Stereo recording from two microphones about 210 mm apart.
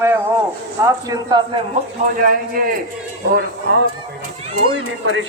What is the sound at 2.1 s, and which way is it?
Speech, 45° right (ahead or behind).